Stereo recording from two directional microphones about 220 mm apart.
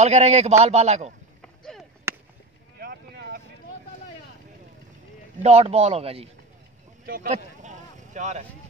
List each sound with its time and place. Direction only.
0.0 s a man's voice: 30° right (ahead or behind)
1.4 s a sound: 5° left (ahead or behind)
2.1 s chop: 10° right (ahead or behind)
2.8 s boat: 45° right (ahead or behind)
5.4 s a man's voice: 30° right (ahead or behind)
7.1 s vehicle: 35° right (ahead or behind)